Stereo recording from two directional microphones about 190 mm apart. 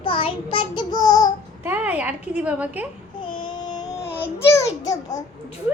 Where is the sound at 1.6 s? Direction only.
10° right (ahead or behind).